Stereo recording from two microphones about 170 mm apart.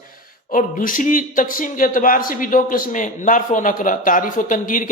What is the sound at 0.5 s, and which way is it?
A man's voice, 50° left (ahead or behind).